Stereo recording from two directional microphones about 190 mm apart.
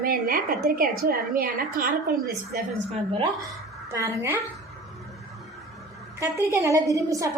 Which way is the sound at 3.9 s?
15° right (ahead or behind).